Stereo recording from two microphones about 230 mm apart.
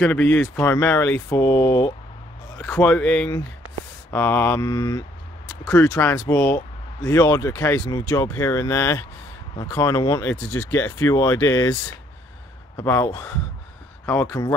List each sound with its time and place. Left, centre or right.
0.0 s speech: centre